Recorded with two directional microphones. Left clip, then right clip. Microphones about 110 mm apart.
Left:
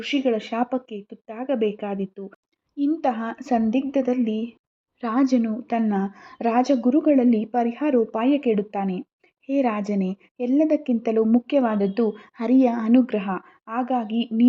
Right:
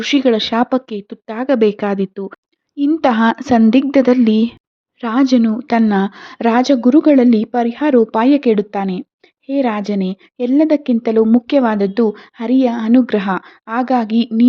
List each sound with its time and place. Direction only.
0.0 s speech: 50° right (ahead or behind)
2.7 s speech: 30° right (ahead or behind)
3.0 s speech: 60° right (ahead or behind)
3.7 s a woman's voice: 70° right (ahead or behind)
4.9 s a woman's voice: 25° right (ahead or behind)
6.8 s a woman's voice: 40° right (ahead or behind)
7.5 s a woman's voice: 20° right (ahead or behind)
7.9 s a woman's voice: 35° right (ahead or behind)
9.5 s a woman's voice: 15° right (ahead or behind)
12.4 s speech: 10° right (ahead or behind)
12.9 s a woman's voice: 35° right (ahead or behind)
13.4 s a woman's voice: 30° right (ahead or behind)